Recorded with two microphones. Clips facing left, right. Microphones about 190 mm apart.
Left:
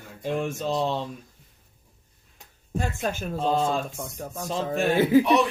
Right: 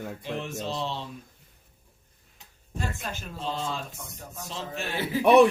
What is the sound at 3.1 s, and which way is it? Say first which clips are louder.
A man's voice: left 9 dB; 50° left (ahead or behind).